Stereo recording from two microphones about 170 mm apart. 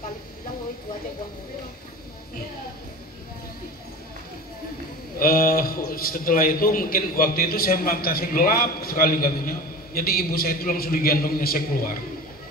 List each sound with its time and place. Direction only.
5.2 s a man's voice: 60° left (ahead or behind)